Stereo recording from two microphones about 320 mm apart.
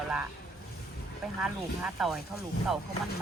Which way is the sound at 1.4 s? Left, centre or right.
Centre.